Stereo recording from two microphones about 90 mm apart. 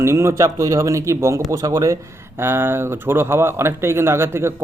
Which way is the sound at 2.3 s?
25° right (ahead or behind).